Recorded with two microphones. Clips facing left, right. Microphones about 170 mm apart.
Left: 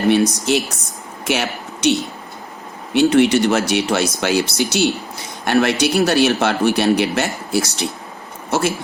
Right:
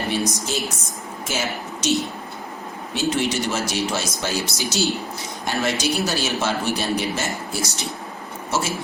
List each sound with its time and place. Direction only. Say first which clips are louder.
0.1 s speech: left 10 dB; 65° left (ahead or behind)